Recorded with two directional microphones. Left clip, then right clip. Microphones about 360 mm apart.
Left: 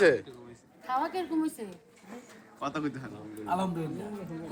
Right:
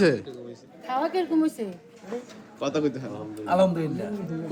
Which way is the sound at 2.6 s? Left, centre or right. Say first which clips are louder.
Right 8 dB; left.